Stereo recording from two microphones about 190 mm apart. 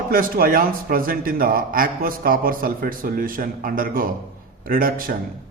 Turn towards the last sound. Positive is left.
turn(degrees=-50)  # may be behind; listen again after turning